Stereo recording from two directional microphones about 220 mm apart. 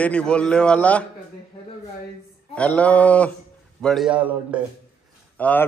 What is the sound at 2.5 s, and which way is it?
A man's voice, 5° left (ahead or behind).